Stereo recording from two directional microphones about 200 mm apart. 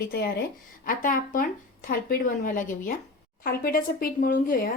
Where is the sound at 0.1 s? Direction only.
55° left (ahead or behind).